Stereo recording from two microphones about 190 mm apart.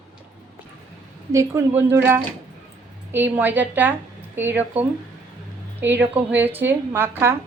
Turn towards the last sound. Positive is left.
turn(degrees=-10)  # may be behind; listen again after turning